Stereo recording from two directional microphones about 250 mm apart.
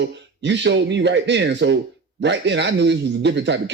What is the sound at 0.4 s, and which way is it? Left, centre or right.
A man's voice, right.